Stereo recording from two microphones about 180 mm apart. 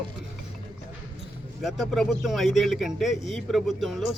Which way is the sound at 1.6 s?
Centre (ahead or behind).